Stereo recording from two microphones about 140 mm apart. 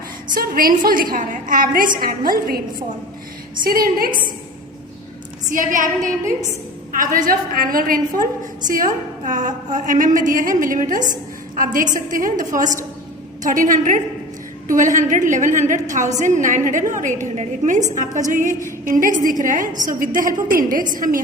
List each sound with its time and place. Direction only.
0.3 s a woman's voice: 90° right
3.6 s a woman's voice: 90° right
5.5 s a woman's voice: 70° right (ahead or behind)